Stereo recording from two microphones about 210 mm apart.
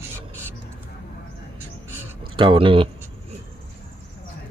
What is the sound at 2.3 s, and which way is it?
Speech, 25° right (ahead or behind).